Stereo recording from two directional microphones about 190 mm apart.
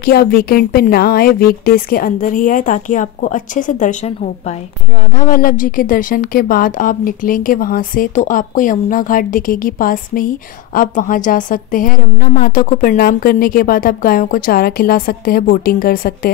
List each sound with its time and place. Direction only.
0.0 s speech: 50° left (ahead or behind)